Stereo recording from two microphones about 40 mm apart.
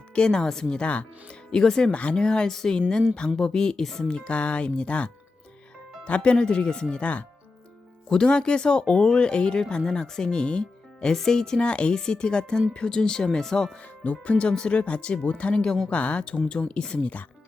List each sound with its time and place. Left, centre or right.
0.1 s speech: left
1.9 s speech: left
2.5 s speech: centre
4.2 s speech: left
8.1 s speech: left
11.1 s speech: centre
13.8 s speech: left